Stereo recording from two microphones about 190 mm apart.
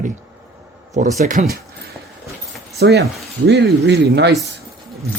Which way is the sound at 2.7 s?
60° right (ahead or behind).